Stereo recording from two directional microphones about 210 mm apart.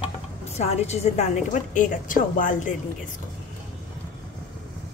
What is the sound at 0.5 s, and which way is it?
A woman's voice, 30° left (ahead or behind).